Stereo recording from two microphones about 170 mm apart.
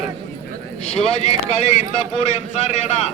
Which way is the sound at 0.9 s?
40° left (ahead or behind).